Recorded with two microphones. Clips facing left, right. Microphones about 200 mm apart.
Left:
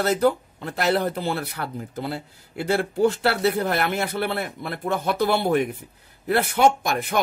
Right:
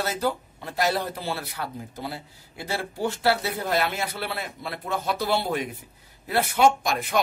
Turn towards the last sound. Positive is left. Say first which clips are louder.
# left 1 dB
turn(degrees=55)  # may be behind; listen again after turning